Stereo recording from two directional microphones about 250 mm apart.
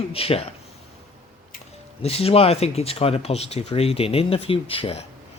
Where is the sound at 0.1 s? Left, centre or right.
Left.